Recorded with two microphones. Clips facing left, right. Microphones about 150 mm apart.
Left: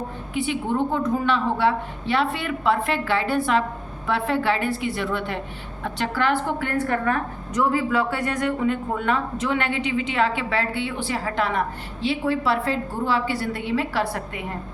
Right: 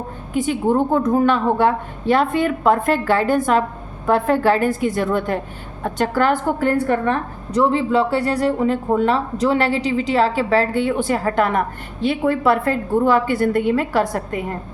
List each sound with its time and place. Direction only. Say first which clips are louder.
0.3 s a woman's voice: right 6 dB; 45° right (ahead or behind)